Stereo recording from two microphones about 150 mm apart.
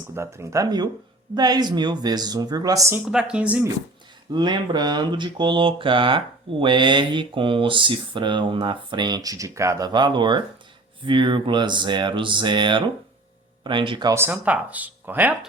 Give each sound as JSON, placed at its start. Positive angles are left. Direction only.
{"t": 0.1, "sound": "speech", "side_deg": -15}
{"t": 3.1, "sound": "speech", "side_deg": -5}
{"t": 4.3, "sound": "a sound", "side_deg": -30}
{"t": 14.1, "sound": "speech", "side_deg": -15}